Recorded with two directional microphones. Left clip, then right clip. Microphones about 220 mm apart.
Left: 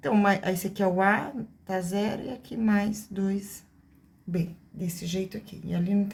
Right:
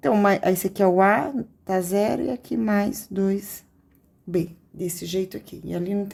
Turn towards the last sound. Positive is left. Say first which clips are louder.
# right 4 dB
turn(degrees=-40)  # may be behind; listen again after turning